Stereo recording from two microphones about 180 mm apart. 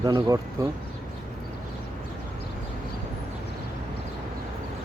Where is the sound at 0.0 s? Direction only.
20° right (ahead or behind).